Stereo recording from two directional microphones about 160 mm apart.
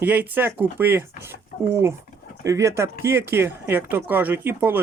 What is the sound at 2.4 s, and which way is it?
Speech, 20° right (ahead or behind).